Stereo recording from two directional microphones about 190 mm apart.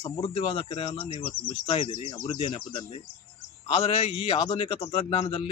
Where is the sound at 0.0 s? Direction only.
25° left (ahead or behind).